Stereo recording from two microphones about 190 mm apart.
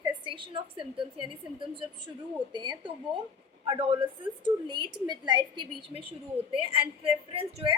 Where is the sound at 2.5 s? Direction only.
25° right (ahead or behind).